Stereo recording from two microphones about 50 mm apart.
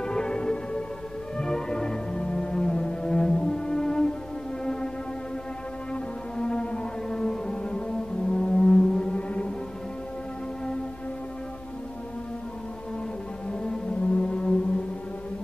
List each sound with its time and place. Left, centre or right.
0.0 s music: centre
6.3 s music: centre
13.5 s music: centre